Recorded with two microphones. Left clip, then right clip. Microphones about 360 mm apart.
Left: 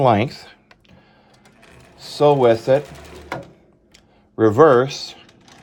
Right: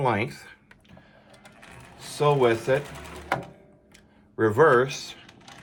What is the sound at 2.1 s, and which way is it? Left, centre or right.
Speech, left.